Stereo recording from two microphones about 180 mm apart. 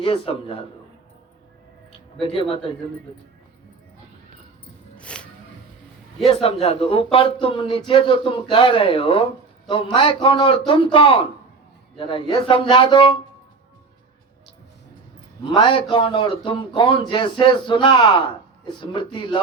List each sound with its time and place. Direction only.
0.0 s speech: 30° left (ahead or behind)
2.1 s a man's voice: 30° left (ahead or behind)
4.9 s music: 5° left (ahead or behind)
6.2 s a man's voice: 35° left (ahead or behind)
15.4 s a man's voice: 25° left (ahead or behind)